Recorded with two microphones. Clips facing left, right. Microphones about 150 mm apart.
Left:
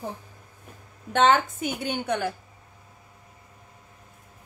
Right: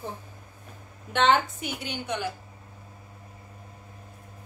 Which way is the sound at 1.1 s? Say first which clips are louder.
Left 2 dB; 45° left (ahead or behind).